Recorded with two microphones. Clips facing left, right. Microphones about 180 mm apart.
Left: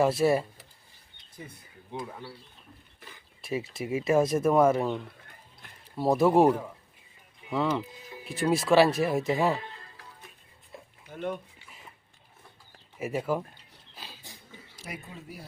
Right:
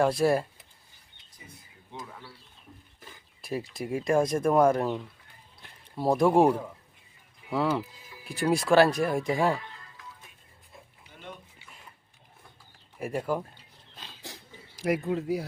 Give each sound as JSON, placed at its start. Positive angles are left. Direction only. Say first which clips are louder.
{"t": 0.0, "sound": "speech", "louder": "even", "side_deg": 5}
{"t": 1.9, "sound": "speech", "louder": "left 5 dB", "side_deg": 25}
{"t": 3.4, "sound": "speech", "louder": "left 1 dB", "side_deg": 0}
{"t": 6.0, "sound": "speech", "louder": "even", "side_deg": 5}
{"t": 7.5, "sound": "speech", "louder": "right 1 dB", "side_deg": -5}
{"t": 9.6, "sound": "music", "louder": "left 3 dB", "side_deg": 30}
{"t": 11.1, "sound": "a sound", "louder": "left 12 dB", "side_deg": 50}
{"t": 13.0, "sound": "speech", "louder": "even", "side_deg": 5}
{"t": 13.9, "sound": "a sound", "louder": "left 2 dB", "side_deg": 10}
{"t": 14.2, "sound": "a sound", "louder": "right 4 dB", "side_deg": -90}
{"t": 15.1, "sound": "speech", "louder": "right 15 dB", "side_deg": -90}